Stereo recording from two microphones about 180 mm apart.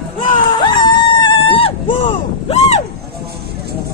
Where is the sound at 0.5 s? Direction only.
25° left (ahead or behind).